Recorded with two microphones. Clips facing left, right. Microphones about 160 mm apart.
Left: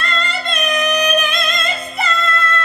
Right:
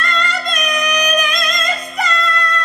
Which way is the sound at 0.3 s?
40° right (ahead or behind).